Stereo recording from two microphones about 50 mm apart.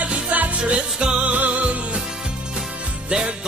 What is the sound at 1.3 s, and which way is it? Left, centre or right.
Music, right.